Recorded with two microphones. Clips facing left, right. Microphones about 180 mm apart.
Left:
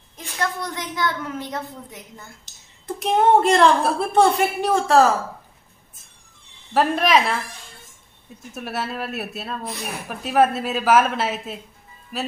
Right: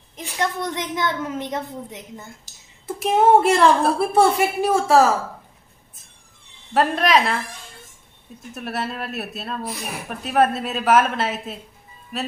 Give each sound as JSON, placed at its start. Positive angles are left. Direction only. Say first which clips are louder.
{"t": 0.4, "sound": "a woman's voice", "louder": "right 2 dB", "side_deg": -20}
{"t": 2.4, "sound": "a woman's voice", "louder": "left 1 dB", "side_deg": -5}
{"t": 6.7, "sound": "a woman's voice", "louder": "even", "side_deg": 0}
{"t": 8.5, "sound": "a woman's voice", "louder": "even", "side_deg": 0}